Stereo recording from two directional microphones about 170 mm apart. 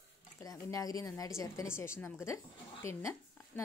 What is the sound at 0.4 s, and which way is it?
A woman's voice, 20° left (ahead or behind).